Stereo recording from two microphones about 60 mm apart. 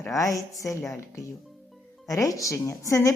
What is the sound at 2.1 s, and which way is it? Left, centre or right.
A woman's voice, left.